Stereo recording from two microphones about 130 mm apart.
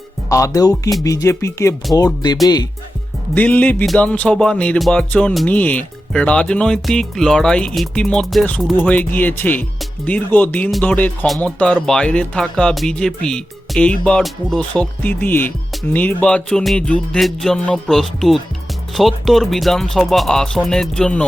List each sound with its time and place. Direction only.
0.3 s speech: 25° left (ahead or behind)
3.3 s speech: 10° left (ahead or behind)